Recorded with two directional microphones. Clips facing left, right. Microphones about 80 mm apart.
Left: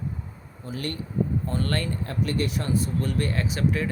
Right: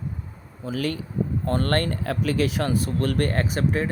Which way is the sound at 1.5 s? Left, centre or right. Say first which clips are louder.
Right 5 dB; right.